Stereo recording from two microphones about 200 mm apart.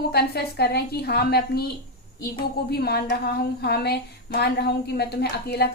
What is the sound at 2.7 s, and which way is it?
A woman's voice, 55° left (ahead or behind).